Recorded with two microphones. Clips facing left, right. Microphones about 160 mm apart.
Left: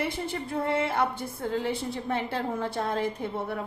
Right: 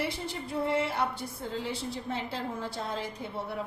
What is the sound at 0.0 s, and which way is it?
A woman's voice, 50° left (ahead or behind).